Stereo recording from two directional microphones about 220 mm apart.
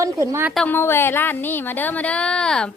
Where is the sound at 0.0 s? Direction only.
15° right (ahead or behind).